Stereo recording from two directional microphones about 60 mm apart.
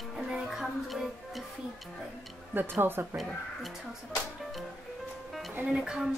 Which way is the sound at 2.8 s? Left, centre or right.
Right.